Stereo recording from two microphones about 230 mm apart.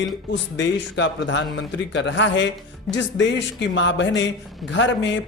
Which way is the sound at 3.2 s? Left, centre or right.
Left.